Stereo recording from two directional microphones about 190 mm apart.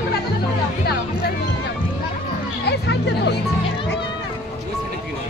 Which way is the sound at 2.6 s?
65° left (ahead or behind).